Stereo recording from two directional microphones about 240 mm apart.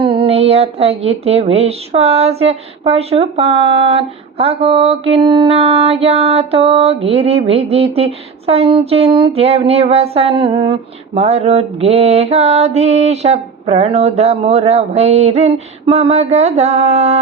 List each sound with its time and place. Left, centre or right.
0.0 s a woman's voice: right